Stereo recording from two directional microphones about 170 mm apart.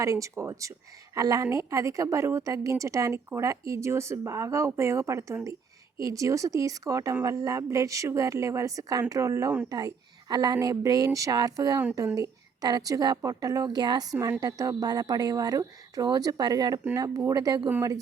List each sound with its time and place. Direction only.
0.0 s a woman's voice: 20° right (ahead or behind)